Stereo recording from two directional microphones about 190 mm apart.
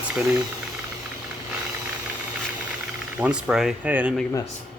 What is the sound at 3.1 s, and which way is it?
Speech, 5° right (ahead or behind).